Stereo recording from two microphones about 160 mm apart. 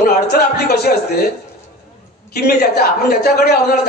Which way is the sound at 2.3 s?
85° left.